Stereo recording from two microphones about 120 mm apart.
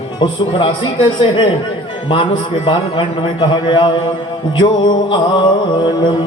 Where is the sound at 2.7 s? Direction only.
40° left (ahead or behind).